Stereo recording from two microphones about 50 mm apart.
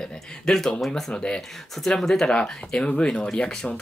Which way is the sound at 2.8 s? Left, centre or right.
Left.